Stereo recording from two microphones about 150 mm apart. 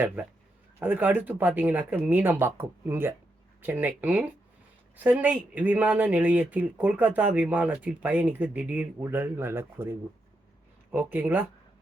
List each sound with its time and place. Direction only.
0.8 s speech: 10° right (ahead or behind)
10.9 s speech: 15° right (ahead or behind)